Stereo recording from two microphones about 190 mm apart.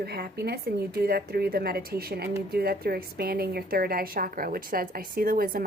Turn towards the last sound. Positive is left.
turn(degrees=-50)  # may be behind; listen again after turning